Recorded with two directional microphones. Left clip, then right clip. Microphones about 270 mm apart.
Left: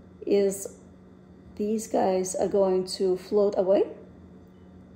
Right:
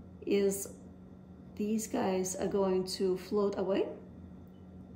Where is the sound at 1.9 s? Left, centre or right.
Centre.